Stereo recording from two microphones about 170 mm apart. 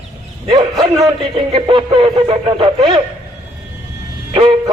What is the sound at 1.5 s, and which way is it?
A man's voice, 30° right (ahead or behind).